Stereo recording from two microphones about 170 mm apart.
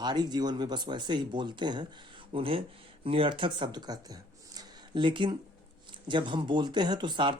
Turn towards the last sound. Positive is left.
turn(degrees=-25)  # may be behind; listen again after turning